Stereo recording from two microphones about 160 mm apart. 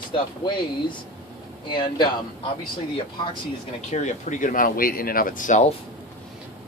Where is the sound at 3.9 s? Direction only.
50° left (ahead or behind).